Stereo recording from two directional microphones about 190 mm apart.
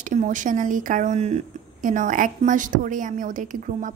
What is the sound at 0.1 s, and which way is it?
A woman's voice, 40° right (ahead or behind).